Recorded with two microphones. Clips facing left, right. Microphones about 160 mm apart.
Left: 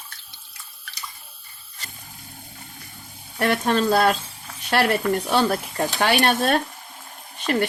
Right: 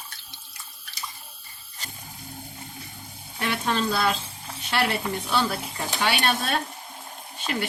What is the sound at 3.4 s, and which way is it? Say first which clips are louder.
Speech: left 6 dB; 50° left (ahead or behind).